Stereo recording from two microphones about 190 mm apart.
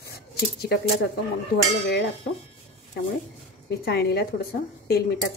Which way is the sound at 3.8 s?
60° left (ahead or behind).